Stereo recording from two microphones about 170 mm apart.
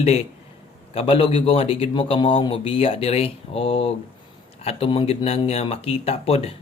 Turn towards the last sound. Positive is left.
turn(degrees=35)  # may be behind; listen again after turning